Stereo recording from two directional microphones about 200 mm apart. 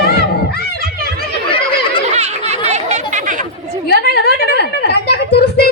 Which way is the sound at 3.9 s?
55° left (ahead or behind).